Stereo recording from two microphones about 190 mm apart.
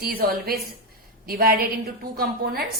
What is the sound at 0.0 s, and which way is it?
A woman's voice, 50° right (ahead or behind).